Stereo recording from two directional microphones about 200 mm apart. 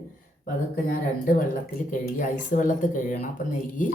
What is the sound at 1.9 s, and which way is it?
Speech, 40° left (ahead or behind).